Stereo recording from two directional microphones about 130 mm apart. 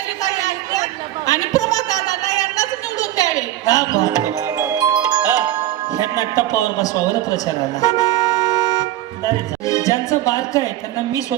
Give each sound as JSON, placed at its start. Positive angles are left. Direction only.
{"t": 0.2, "sound": "a sound", "side_deg": 25}
{"t": 4.5, "sound": "music", "side_deg": -30}
{"t": 6.1, "sound": "speech", "side_deg": 25}
{"t": 7.4, "sound": "toot", "side_deg": 25}
{"t": 9.6, "sound": "speech", "side_deg": 25}